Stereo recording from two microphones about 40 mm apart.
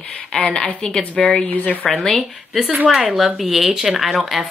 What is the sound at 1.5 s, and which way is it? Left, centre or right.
Speech, left.